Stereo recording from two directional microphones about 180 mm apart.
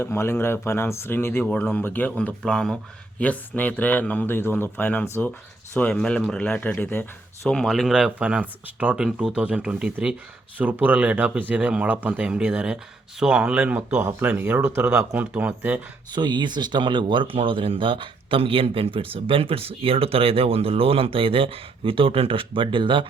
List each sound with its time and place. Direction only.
0.0 s speech: 15° left (ahead or behind); by 15.8 s 10° right (ahead or behind)
16.1 s speech: 25° right (ahead or behind)